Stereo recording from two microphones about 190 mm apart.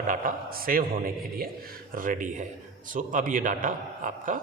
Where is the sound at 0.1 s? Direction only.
50° right (ahead or behind).